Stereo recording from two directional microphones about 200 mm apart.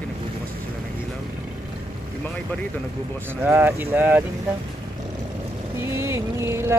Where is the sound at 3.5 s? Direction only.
10° right (ahead or behind).